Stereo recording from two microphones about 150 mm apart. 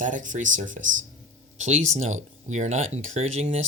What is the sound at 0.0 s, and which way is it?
Speech, 60° right (ahead or behind).